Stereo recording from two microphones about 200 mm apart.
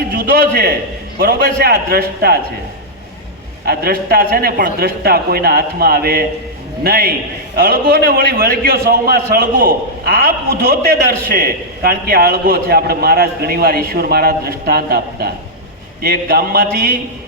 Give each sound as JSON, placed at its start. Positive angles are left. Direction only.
{"t": 0.1, "sound": "a man's voice", "side_deg": -50}
{"t": 3.7, "sound": "a man's voice", "side_deg": -50}